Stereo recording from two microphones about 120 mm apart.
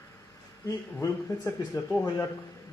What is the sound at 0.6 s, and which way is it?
Speech, 25° left (ahead or behind).